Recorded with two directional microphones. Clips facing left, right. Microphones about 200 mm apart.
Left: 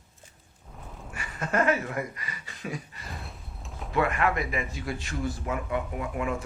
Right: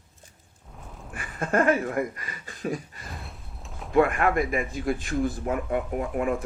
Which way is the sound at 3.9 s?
50° right (ahead or behind).